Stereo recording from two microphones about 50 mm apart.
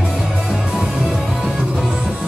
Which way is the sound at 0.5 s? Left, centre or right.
Centre.